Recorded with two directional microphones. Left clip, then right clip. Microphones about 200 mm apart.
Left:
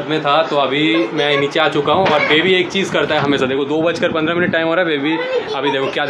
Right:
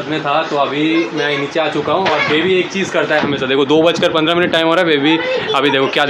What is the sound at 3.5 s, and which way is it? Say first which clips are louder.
Speech: right 6 dB; 30° right (ahead or behind).